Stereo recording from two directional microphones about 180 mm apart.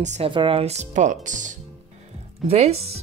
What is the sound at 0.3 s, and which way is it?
Speech, 30° right (ahead or behind).